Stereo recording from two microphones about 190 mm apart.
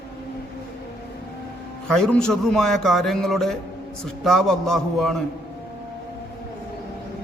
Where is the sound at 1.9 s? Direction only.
5° left (ahead or behind).